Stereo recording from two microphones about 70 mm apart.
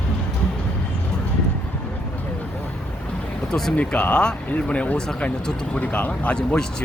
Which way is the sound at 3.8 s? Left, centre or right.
Centre.